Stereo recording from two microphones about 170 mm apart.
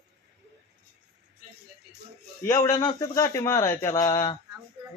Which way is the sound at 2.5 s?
15° left (ahead or behind).